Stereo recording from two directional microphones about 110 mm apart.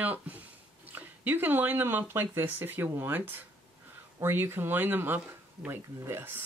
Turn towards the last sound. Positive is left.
turn(degrees=-20)  # may be behind; listen again after turning